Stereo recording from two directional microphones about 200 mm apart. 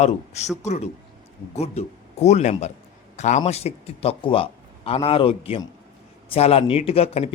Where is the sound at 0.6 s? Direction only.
35° left (ahead or behind).